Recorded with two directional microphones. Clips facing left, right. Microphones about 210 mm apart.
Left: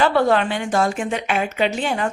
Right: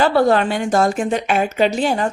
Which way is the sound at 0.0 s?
35° right (ahead or behind).